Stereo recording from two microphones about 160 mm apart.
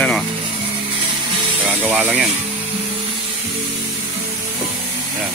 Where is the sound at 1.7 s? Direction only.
10° right (ahead or behind).